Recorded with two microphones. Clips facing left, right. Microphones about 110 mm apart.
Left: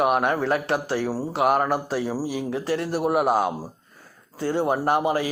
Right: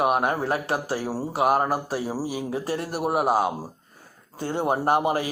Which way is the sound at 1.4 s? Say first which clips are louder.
Left 1 dB; 35° right (ahead or behind).